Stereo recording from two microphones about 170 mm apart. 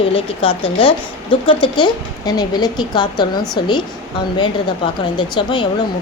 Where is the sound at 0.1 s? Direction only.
30° left (ahead or behind).